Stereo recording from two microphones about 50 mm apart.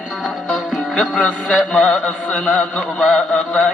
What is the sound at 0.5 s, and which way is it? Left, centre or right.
Music, centre.